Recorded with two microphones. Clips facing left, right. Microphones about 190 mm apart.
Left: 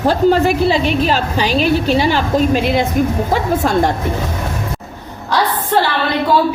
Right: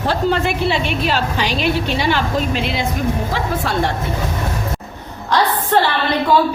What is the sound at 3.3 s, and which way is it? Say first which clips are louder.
Speech: left 5 dB; 45° left (ahead or behind).